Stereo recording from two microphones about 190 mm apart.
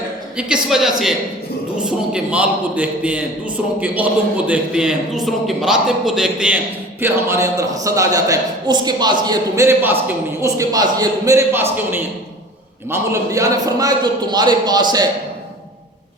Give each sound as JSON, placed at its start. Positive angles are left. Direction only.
{"t": 0.3, "sound": "a man's voice", "side_deg": -5}
{"t": 7.0, "sound": "a man's voice", "side_deg": -15}